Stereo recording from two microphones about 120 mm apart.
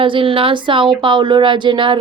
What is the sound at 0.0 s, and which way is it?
A woman's voice, 45° right (ahead or behind).